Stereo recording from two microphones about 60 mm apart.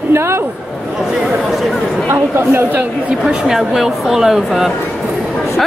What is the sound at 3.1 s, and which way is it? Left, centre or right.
Speech, centre.